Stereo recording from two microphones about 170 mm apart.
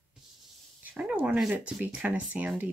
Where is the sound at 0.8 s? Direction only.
5° right (ahead or behind).